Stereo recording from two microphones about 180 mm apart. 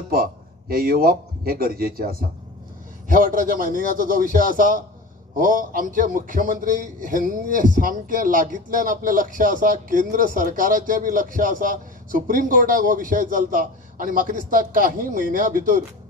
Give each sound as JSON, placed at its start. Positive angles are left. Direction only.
{"t": 0.1, "sound": "a man's voice", "side_deg": -55}